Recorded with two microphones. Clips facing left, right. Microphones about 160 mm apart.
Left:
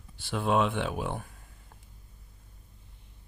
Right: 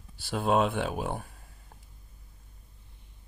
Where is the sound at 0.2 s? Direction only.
40° right (ahead or behind).